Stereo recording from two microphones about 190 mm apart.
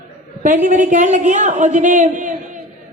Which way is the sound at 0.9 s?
40° right (ahead or behind).